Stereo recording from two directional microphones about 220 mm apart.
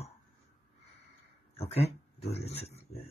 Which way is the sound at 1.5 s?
30° left (ahead or behind).